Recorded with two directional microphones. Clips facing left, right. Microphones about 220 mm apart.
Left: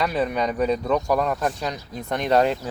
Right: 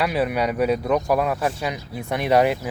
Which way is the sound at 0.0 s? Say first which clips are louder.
Right 1 dB; 10° right (ahead or behind).